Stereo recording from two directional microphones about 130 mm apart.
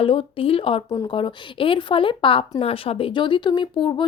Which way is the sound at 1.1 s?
40° left (ahead or behind).